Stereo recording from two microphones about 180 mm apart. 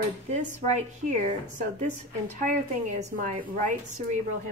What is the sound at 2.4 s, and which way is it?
A woman's voice, 45° right (ahead or behind).